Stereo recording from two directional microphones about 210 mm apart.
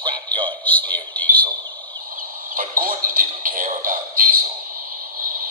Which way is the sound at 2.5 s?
40° right (ahead or behind).